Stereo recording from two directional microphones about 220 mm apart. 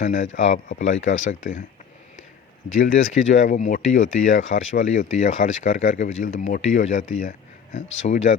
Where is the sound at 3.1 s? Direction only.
35° left (ahead or behind).